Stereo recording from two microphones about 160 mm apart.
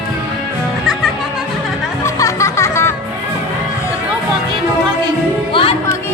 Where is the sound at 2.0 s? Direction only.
20° left (ahead or behind).